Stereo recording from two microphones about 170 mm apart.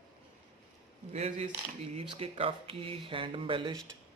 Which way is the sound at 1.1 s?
40° right (ahead or behind).